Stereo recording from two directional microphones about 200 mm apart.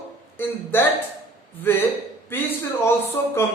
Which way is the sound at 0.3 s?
10° left (ahead or behind).